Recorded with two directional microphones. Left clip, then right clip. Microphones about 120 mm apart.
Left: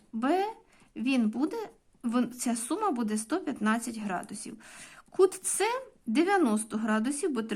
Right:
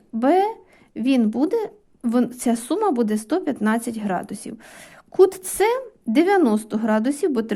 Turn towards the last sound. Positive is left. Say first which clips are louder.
# right 9 dB
turn(degrees=-40)  # may be behind; listen again after turning